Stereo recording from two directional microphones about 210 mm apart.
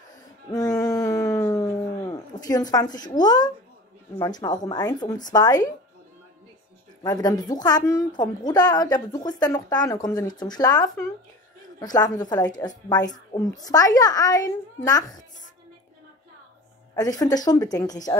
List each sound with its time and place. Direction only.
0.5 s a sound: 15° left (ahead or behind)
4.2 s a woman's voice: 20° left (ahead or behind)
7.0 s a woman's voice: 20° left (ahead or behind)
16.9 s speech: 20° left (ahead or behind)